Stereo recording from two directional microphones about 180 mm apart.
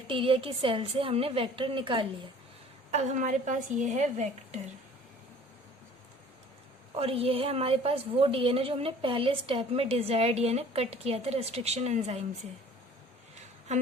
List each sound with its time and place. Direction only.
0.1 s a woman's voice: 30° right (ahead or behind)
2.9 s a woman's voice: 40° right (ahead or behind)
6.9 s a woman's voice: 35° right (ahead or behind)
13.7 s a sound: 40° right (ahead or behind)